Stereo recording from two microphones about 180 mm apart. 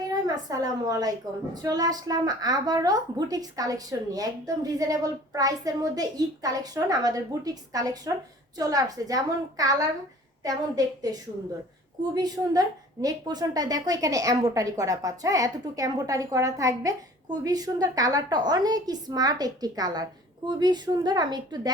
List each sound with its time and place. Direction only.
0.0 s a woman's voice: 20° right (ahead or behind)